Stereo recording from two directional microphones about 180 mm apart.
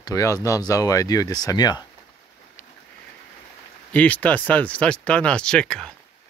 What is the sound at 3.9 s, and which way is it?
Speech, 10° left (ahead or behind).